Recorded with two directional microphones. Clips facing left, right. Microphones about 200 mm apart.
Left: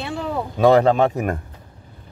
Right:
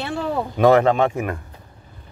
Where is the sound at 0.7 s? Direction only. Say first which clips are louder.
Left 1 dB; 35° left (ahead or behind).